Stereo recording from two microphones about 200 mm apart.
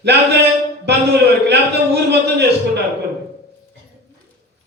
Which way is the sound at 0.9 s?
55° right (ahead or behind).